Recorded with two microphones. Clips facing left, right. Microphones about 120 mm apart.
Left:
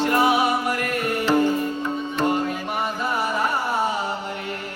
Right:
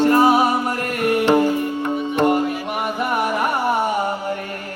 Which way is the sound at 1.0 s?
60° right (ahead or behind).